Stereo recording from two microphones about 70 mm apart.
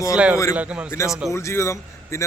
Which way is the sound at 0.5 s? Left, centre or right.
Centre.